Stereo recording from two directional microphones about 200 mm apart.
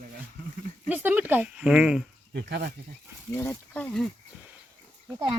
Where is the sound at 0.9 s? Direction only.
10° right (ahead or behind).